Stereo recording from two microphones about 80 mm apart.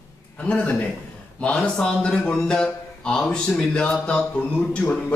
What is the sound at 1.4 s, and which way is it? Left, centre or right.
A man's voice, centre.